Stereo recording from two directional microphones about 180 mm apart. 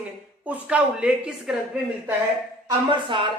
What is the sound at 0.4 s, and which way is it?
A woman's voice, 5° right (ahead or behind).